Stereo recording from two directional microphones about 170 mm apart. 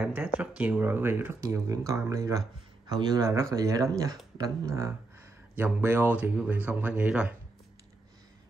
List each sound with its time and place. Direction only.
0.0 s speech: 10° right (ahead or behind)